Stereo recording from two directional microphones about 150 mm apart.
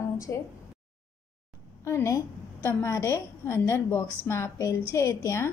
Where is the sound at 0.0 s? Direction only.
20° left (ahead or behind).